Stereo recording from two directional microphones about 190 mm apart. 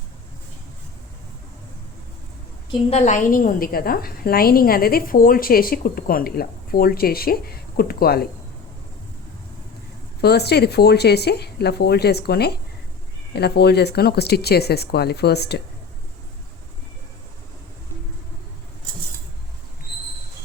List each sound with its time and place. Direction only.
2.9 s a woman's voice: 40° left (ahead or behind)
10.2 s speech: 60° left (ahead or behind)